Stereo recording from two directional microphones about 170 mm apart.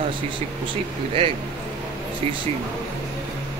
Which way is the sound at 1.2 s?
30° right (ahead or behind).